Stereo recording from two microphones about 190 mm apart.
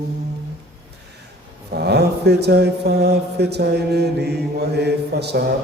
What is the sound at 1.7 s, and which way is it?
Mantra, 60° right (ahead or behind).